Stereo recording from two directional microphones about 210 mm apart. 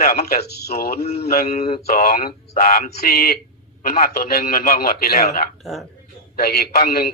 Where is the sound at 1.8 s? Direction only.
45° left (ahead or behind).